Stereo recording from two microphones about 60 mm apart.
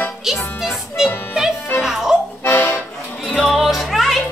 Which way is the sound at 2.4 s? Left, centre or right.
Left.